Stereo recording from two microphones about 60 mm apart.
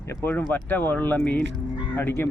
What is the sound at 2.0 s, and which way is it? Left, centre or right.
Speech, left.